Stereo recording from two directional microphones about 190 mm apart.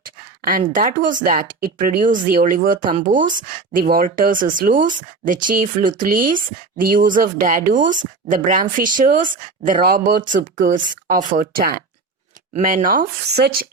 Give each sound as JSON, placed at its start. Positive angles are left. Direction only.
{"t": 0.4, "sound": "speech", "side_deg": -45}